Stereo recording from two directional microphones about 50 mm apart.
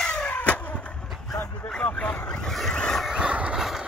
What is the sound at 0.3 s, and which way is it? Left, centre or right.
Vehicle, left.